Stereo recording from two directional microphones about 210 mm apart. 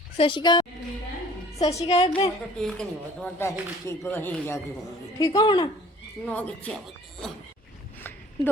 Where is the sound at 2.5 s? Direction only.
5° left (ahead or behind).